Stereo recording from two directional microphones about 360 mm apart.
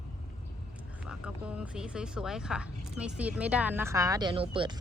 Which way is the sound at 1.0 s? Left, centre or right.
Centre.